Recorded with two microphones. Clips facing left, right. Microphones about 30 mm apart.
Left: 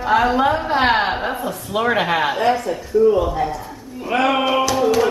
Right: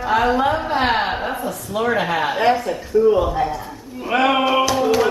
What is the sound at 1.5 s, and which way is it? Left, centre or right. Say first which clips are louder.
Speech: left 1 dB; left.